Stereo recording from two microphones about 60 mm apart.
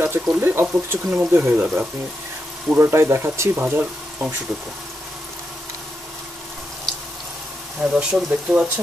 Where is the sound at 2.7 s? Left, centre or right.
Right.